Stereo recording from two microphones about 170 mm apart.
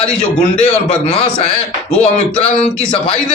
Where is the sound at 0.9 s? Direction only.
35° left (ahead or behind).